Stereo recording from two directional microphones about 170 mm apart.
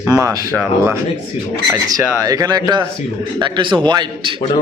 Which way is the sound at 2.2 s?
20° right (ahead or behind).